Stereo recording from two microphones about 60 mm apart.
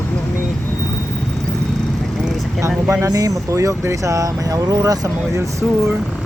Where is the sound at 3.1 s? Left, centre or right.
Right.